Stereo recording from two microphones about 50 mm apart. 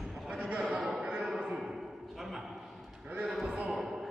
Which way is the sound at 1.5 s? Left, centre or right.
Centre.